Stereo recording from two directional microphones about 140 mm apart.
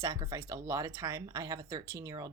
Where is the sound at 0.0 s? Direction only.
25° right (ahead or behind).